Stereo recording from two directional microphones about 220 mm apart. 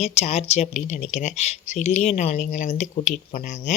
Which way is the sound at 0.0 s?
30° left (ahead or behind).